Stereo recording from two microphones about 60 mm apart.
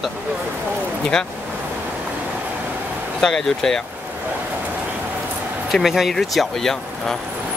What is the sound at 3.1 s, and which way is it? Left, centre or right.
Speech, centre.